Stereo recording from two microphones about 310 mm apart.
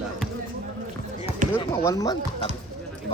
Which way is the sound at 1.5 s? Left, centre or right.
Centre.